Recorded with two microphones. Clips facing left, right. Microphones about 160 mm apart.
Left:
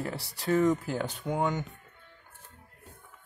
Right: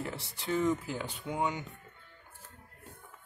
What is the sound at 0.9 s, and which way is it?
Speech, 45° left (ahead or behind).